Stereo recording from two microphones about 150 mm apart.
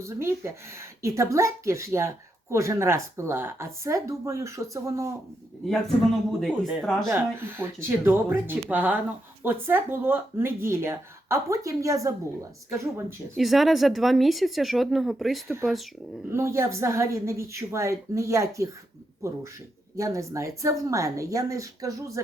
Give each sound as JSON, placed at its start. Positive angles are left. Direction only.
{"t": 0.0, "sound": "speech", "side_deg": -20}
{"t": 6.4, "sound": "speech", "side_deg": 0}
{"t": 7.1, "sound": "speech", "side_deg": -15}
{"t": 13.3, "sound": "speech", "side_deg": 0}
{"t": 16.3, "sound": "speech", "side_deg": -20}
{"t": 20.0, "sound": "speech", "side_deg": -20}